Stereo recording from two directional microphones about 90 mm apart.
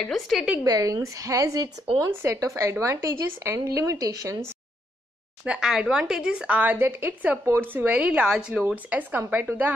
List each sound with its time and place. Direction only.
0.0 s a woman's voice: centre (ahead or behind)
0.7 s a woman's voice: 40° right (ahead or behind)
5.4 s a woman's voice: 5° right (ahead or behind)